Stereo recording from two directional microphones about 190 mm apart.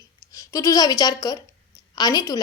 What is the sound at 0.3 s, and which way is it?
A woman's voice, 15° left (ahead or behind).